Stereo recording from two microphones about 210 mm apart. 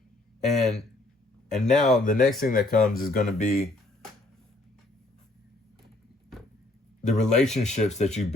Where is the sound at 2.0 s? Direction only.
40° left (ahead or behind).